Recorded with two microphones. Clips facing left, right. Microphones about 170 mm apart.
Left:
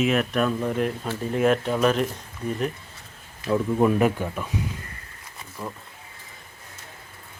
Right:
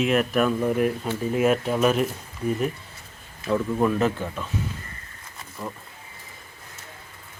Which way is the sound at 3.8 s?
15° left (ahead or behind).